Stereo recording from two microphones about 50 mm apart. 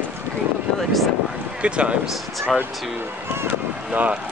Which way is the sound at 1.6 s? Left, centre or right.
Right.